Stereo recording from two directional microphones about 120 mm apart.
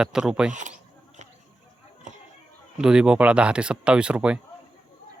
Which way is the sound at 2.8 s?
5° right (ahead or behind).